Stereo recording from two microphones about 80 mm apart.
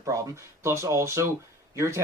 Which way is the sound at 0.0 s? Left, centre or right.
Right.